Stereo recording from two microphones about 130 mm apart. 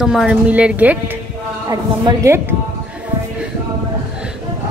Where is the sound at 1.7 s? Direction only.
25° right (ahead or behind).